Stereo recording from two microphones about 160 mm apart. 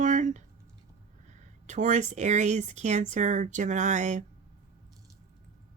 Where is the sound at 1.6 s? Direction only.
50° right (ahead or behind).